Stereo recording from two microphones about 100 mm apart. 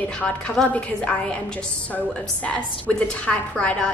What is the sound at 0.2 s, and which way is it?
A woman's voice, 10° left (ahead or behind).